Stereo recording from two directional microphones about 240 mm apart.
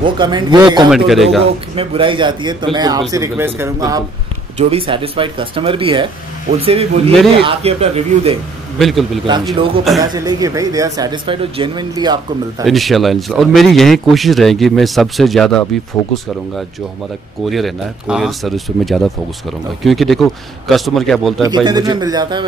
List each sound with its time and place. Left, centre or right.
0.0 s speech: centre
0.8 s speech: centre
1.8 s speech: right
4.6 s speech: right
8.7 s speech: centre
10.1 s speech: centre
12.6 s speech: centre
17.5 s speech: centre
21.4 s speech: centre